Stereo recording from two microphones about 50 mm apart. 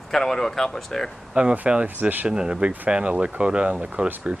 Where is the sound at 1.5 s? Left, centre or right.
Right.